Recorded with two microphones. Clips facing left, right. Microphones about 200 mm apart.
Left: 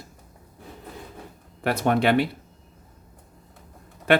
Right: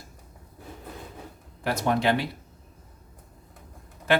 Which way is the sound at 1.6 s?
60° left (ahead or behind).